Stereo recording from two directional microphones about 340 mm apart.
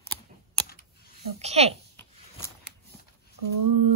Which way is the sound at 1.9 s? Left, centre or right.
Centre.